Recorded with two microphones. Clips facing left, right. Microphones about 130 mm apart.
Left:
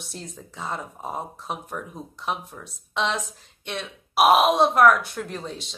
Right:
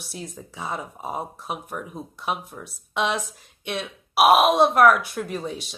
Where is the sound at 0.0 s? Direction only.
5° right (ahead or behind).